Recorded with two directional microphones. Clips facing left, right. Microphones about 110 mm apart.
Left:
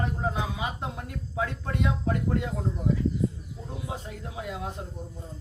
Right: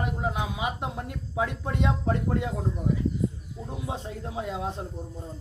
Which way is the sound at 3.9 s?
30° right (ahead or behind).